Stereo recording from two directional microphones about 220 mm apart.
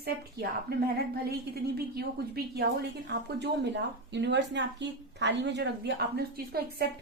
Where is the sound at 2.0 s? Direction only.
45° right (ahead or behind).